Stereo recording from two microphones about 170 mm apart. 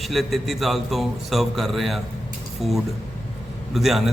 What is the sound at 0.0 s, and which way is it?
A man's voice, centre (ahead or behind).